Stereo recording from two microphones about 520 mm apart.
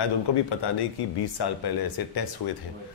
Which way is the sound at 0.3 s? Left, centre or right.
Left.